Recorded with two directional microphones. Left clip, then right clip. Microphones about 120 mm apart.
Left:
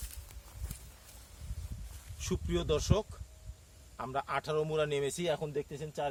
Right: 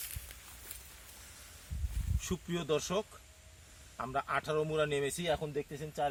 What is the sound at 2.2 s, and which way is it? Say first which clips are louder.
Speech: left 3 dB; 40° left (ahead or behind).